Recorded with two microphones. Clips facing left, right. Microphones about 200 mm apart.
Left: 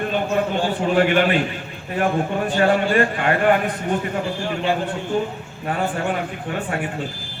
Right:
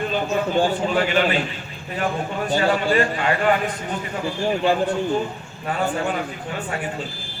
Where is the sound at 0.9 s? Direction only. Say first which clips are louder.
Left 5 dB; 55° left (ahead or behind).